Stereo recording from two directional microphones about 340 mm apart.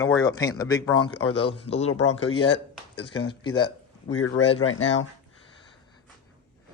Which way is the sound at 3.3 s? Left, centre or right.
Centre.